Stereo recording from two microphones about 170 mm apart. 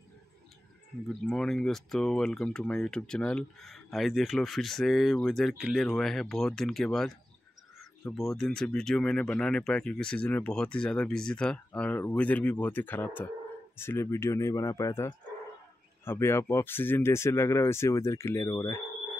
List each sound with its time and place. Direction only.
1.2 s speech: 5° left (ahead or behind); by 18.8 s 20° left (ahead or behind)